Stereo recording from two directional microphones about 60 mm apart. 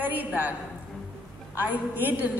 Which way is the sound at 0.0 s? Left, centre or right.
Right.